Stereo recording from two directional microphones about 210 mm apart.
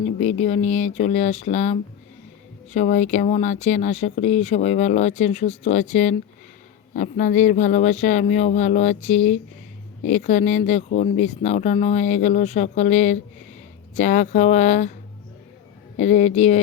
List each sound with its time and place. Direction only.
0.0 s speech: 30° left (ahead or behind)
16.0 s speech: 35° left (ahead or behind)